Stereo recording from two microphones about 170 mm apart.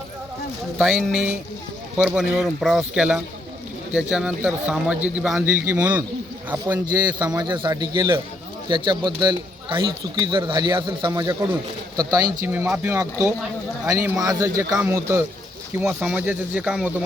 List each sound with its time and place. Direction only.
0.8 s speech: 5° right (ahead or behind)
7.2 s speech: 20° right (ahead or behind); by 16.9 s 5° right (ahead or behind)